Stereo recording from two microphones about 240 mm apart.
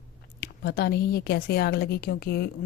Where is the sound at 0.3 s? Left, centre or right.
Left.